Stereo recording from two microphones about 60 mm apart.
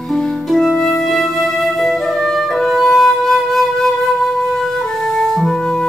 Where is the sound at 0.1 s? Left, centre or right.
Centre.